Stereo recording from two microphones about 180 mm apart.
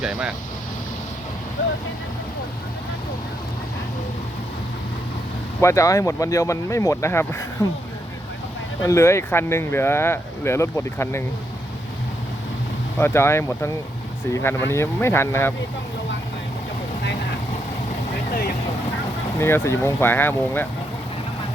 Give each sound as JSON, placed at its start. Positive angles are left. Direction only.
{"t": 0.0, "sound": "speech", "side_deg": -5}
{"t": 5.5, "sound": "speech", "side_deg": 15}
{"t": 8.8, "sound": "speech", "side_deg": 15}
{"t": 13.0, "sound": "speech", "side_deg": 15}
{"t": 19.4, "sound": "speech", "side_deg": 15}